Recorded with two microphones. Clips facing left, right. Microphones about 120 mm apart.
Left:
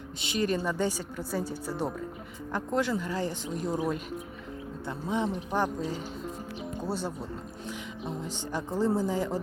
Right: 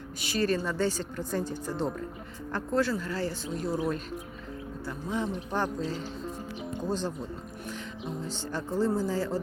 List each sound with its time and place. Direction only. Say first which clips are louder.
0.2 s speech: right 1 dB; 20° left (ahead or behind)
8.2 s speech: even; 15° left (ahead or behind)